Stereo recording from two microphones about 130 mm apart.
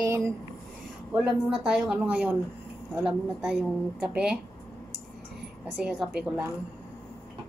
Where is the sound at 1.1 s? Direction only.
5° right (ahead or behind).